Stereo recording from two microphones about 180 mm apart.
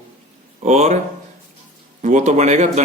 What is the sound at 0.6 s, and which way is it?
Speech, 40° right (ahead or behind).